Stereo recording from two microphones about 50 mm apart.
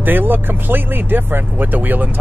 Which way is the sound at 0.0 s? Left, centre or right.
Right.